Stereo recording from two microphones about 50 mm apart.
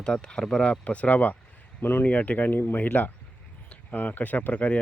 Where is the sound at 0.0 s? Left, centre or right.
Centre.